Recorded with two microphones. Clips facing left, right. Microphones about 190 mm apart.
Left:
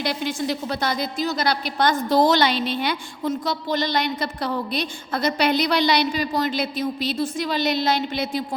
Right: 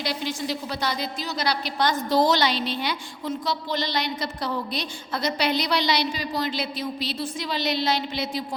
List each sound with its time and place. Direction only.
0.0 s a woman's voice: 55° left (ahead or behind)